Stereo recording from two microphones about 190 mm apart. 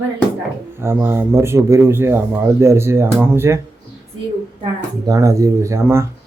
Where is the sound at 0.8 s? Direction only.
10° right (ahead or behind).